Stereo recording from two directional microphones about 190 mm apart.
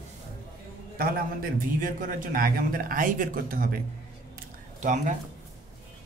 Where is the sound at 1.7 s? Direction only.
45° right (ahead or behind).